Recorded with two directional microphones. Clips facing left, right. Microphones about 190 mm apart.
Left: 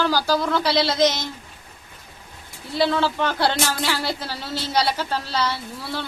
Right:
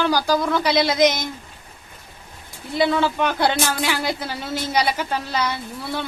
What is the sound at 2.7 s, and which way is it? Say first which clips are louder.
Speech: right 1 dB; 15° right (ahead or behind).